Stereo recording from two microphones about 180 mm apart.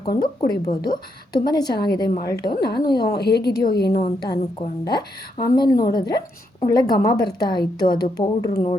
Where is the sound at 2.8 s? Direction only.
25° left (ahead or behind).